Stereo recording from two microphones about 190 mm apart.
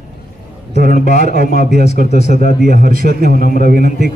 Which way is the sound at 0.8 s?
50° right (ahead or behind).